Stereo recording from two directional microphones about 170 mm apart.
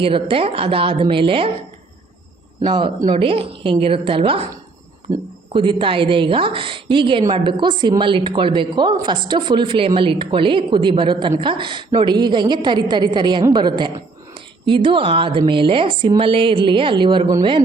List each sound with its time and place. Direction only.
0.0 s a woman's voice: 30° right (ahead or behind)
2.6 s a woman's voice: 25° right (ahead or behind)
5.1 s a woman's voice: 20° right (ahead or behind)
5.5 s a woman's voice: 30° right (ahead or behind)